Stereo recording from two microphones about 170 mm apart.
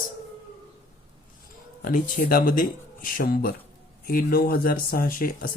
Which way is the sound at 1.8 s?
55° left (ahead or behind).